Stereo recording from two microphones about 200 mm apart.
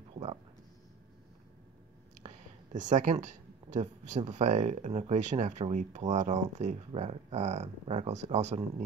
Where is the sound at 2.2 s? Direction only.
25° right (ahead or behind).